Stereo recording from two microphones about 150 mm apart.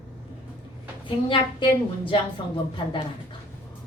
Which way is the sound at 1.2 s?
35° left (ahead or behind).